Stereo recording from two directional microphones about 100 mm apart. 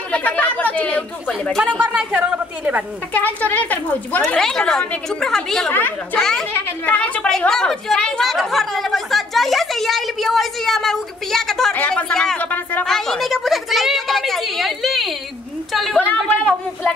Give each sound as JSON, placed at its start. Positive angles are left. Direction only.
{"t": 0.1, "sound": "speech", "side_deg": 15}
{"t": 1.8, "sound": "a woman's voice", "side_deg": -10}
{"t": 3.1, "sound": "a woman's voice", "side_deg": 15}
{"t": 4.2, "sound": "a woman's voice", "side_deg": 5}
{"t": 5.7, "sound": "a woman's voice", "side_deg": 20}
{"t": 6.1, "sound": "a woman's voice", "side_deg": 5}
{"t": 15.7, "sound": "a sound", "side_deg": 0}